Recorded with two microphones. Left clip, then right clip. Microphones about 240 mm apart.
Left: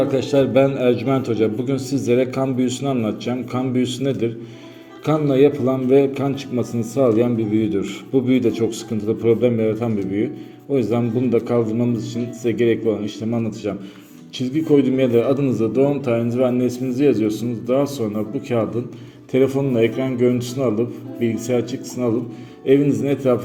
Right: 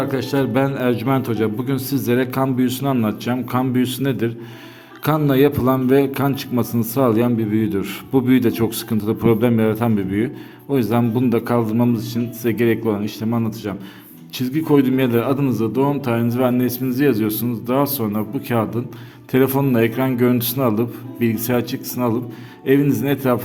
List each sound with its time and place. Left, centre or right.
0.0 s a man's voice: centre
14.3 s a man's voice: right